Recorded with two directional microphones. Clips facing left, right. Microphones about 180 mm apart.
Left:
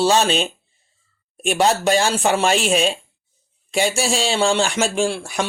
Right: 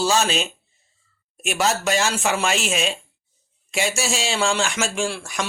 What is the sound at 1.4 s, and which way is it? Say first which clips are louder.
A man's voice: left 5 dB; 30° left (ahead or behind).